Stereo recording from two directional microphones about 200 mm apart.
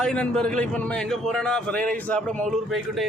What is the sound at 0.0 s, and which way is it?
A man's voice, 5° left (ahead or behind).